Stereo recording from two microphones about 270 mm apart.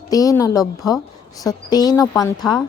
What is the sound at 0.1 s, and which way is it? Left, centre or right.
A woman's voice, centre.